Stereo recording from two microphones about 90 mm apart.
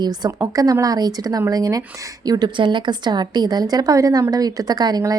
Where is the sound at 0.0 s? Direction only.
50° right (ahead or behind).